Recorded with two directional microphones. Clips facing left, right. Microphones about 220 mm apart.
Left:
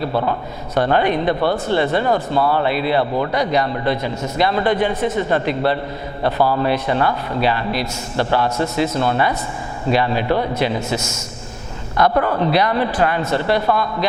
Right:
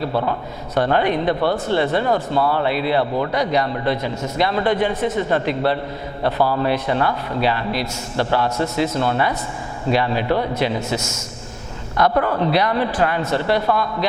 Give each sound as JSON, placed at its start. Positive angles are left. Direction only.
{"t": 0.1, "sound": "speech", "side_deg": 25}
{"t": 8.2, "sound": "speech", "side_deg": 25}
{"t": 11.9, "sound": "speech", "side_deg": 20}